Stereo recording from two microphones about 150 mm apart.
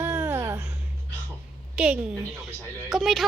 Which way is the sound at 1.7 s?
10° right (ahead or behind).